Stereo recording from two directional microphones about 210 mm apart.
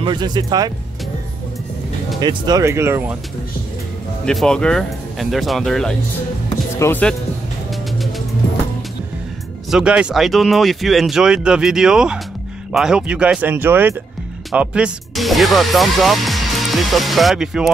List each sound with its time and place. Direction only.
0.0 s speech: 20° right (ahead or behind)
2.1 s speech: 20° right (ahead or behind)
4.3 s speech: 5° left (ahead or behind)
9.7 s speech: 5° right (ahead or behind)